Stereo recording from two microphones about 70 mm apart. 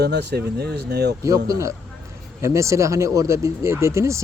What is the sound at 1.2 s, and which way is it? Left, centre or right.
Speech, right.